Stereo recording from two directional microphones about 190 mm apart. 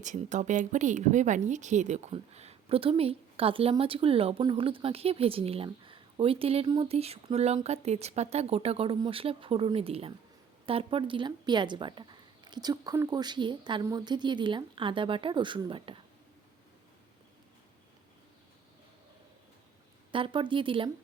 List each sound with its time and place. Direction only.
0.0 s a woman's voice: 40° right (ahead or behind)
20.1 s a woman's voice: 25° right (ahead or behind)